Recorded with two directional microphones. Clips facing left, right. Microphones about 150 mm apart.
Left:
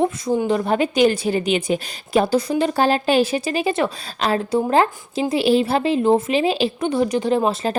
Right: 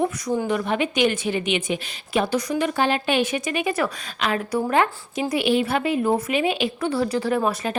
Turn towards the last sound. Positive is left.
turn(degrees=25)  # may be behind; listen again after turning